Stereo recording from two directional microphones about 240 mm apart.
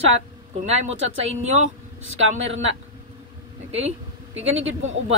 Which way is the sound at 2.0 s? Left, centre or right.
Right.